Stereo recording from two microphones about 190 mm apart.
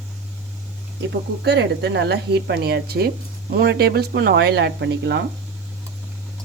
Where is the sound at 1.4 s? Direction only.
60° right (ahead or behind).